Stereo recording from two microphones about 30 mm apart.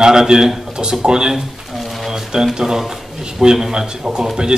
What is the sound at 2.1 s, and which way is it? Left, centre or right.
Speech, centre.